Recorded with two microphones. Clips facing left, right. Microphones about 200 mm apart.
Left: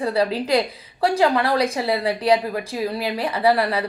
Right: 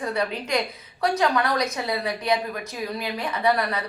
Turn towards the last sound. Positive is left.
turn(degrees=30)  # may be behind; listen again after turning